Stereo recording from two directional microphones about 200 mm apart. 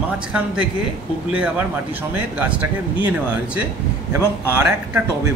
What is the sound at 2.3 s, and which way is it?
Speech, 5° right (ahead or behind).